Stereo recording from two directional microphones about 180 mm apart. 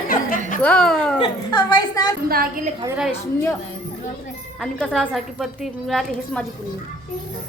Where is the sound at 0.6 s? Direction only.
5° left (ahead or behind).